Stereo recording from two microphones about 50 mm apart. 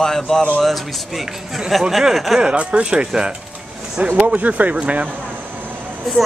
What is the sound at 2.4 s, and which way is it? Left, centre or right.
Speech, centre.